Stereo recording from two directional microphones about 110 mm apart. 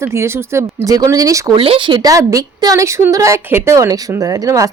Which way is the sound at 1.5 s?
55° right (ahead or behind).